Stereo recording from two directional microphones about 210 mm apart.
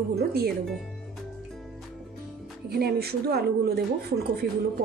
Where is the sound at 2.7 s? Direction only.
50° right (ahead or behind).